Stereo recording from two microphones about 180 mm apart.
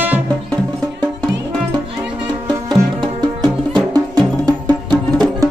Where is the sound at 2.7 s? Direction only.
25° right (ahead or behind).